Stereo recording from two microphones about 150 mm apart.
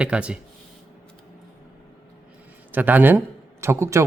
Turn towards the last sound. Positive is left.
turn(degrees=-20)  # may be behind; listen again after turning